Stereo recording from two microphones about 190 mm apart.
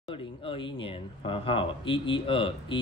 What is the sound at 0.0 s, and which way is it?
Speech, 25° left (ahead or behind).